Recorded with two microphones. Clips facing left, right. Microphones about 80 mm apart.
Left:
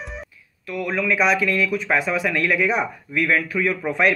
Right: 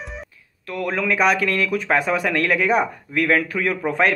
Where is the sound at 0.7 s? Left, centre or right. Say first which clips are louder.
Even; right.